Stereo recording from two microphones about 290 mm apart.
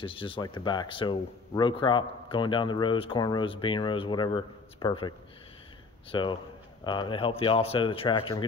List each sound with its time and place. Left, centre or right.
0.0 s speech: centre
6.1 s speech: centre